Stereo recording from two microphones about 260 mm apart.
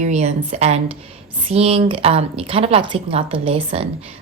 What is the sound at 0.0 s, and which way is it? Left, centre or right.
Speech, right.